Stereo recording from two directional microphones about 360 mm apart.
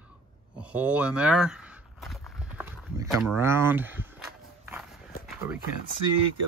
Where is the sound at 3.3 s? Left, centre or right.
Centre.